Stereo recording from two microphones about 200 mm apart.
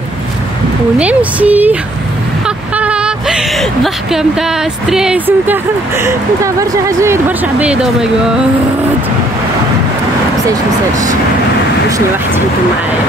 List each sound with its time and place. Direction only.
0.9 s speech: 5° right (ahead or behind)